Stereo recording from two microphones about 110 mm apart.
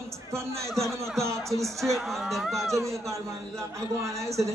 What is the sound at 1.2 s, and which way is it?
Music, 25° right (ahead or behind).